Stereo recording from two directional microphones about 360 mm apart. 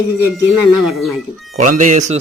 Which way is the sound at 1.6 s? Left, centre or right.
Right.